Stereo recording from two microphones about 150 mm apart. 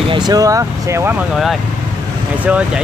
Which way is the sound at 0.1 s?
25° right (ahead or behind).